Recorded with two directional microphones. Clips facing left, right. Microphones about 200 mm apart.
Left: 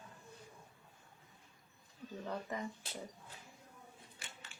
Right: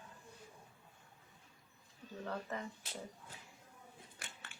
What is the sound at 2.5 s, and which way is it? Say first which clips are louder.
Speech: left 4 dB; 15° left (ahead or behind).